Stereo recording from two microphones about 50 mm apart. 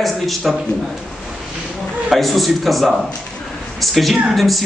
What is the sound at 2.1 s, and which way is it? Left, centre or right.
A man's voice, centre.